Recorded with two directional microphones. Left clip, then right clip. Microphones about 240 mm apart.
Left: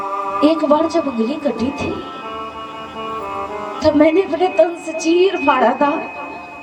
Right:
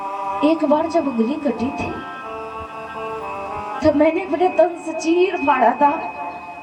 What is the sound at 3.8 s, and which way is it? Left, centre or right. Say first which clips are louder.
A woman's voice: left 3 dB; left.